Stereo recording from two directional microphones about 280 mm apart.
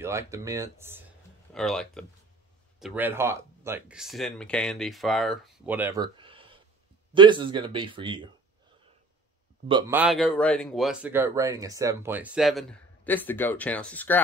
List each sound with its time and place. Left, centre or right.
0.0 s a man's voice: centre
9.7 s a man's voice: centre